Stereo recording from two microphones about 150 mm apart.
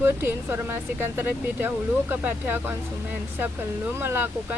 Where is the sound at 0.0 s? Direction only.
15° right (ahead or behind).